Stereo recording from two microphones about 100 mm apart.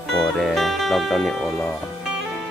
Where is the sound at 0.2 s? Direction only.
Centre (ahead or behind).